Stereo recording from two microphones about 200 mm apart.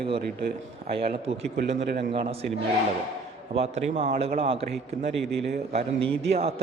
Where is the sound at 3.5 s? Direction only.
30° right (ahead or behind).